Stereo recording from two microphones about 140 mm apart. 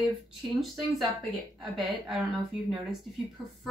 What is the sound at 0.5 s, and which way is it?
Speech, centre (ahead or behind).